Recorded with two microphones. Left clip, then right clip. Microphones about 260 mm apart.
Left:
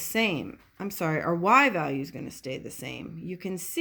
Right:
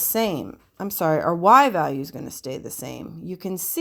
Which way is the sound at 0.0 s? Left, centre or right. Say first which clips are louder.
Right 3 dB; right.